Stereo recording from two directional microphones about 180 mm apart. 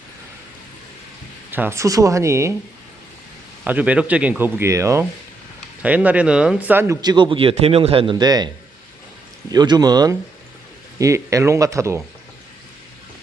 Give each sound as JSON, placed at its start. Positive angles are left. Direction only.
{"t": 1.5, "sound": "speech", "side_deg": -10}
{"t": 3.6, "sound": "a man's voice", "side_deg": -10}
{"t": 9.5, "sound": "a man's voice", "side_deg": -25}